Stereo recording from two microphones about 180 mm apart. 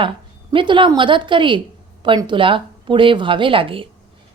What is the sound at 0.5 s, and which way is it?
A woman's voice, 25° right (ahead or behind).